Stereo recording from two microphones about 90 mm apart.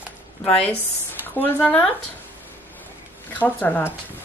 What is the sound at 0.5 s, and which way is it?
Speech, 15° left (ahead or behind).